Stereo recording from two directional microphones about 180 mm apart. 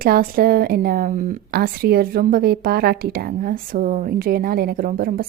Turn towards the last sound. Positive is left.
turn(degrees=-55)  # may be behind; listen again after turning